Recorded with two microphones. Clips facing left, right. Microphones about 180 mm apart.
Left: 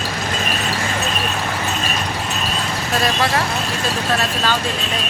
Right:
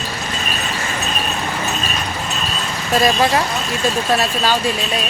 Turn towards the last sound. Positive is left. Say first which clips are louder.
# right 3 dB
turn(degrees=-10)  # may be behind; listen again after turning